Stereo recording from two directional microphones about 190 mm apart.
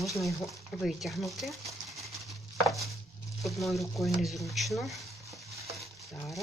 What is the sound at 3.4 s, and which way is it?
Speech, centre (ahead or behind).